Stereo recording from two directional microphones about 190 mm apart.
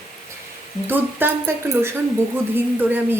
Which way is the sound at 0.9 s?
10° right (ahead or behind).